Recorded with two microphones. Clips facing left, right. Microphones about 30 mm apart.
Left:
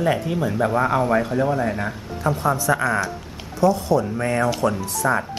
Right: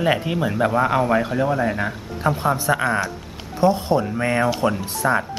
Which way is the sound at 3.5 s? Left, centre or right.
Right.